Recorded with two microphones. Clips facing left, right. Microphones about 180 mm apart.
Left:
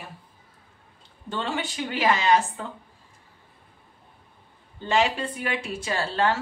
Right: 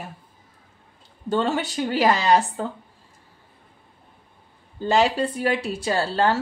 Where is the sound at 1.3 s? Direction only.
40° right (ahead or behind).